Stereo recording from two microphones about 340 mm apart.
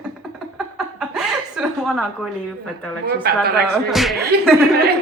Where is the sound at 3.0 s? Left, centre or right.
Right.